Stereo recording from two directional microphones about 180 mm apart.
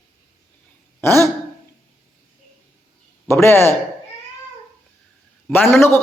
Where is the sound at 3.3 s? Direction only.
15° left (ahead or behind).